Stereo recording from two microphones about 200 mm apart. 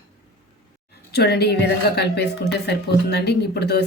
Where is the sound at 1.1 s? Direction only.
55° left (ahead or behind).